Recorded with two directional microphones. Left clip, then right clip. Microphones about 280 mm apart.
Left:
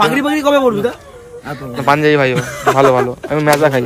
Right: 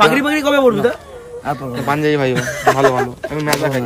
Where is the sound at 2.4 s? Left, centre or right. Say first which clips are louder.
Right 1 dB; left.